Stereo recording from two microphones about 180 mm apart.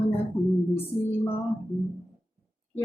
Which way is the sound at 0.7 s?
10° left (ahead or behind).